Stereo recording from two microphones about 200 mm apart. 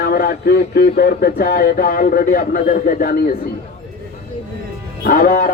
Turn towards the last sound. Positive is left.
turn(degrees=40)  # may be behind; listen again after turning